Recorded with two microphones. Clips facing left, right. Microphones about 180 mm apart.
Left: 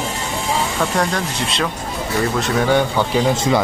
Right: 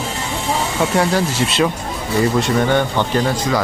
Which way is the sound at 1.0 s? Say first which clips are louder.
Right 4 dB; 5° right (ahead or behind).